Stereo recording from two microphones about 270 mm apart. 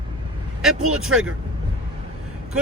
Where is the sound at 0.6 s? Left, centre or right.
Centre.